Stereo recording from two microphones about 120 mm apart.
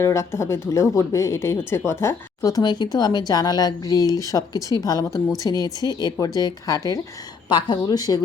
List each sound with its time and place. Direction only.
0.0 s speech: 25° left (ahead or behind)